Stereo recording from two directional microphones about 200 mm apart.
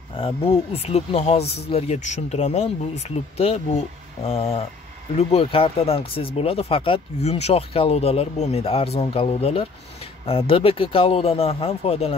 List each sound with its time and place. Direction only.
0.1 s speech: 30° left (ahead or behind)